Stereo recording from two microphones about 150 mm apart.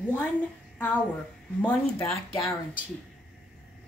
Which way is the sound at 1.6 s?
10° left (ahead or behind).